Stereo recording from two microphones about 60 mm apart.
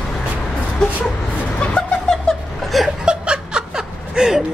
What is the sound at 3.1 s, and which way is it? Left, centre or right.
Snicker, centre.